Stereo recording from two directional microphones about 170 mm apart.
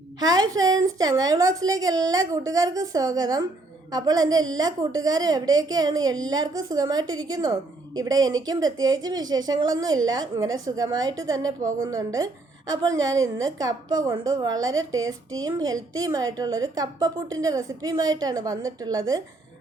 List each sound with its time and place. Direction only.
0.2 s a woman's voice: 20° right (ahead or behind)